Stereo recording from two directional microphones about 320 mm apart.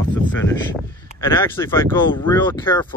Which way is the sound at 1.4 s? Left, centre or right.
Centre.